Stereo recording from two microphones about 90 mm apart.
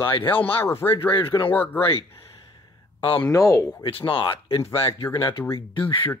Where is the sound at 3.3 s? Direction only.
35° left (ahead or behind).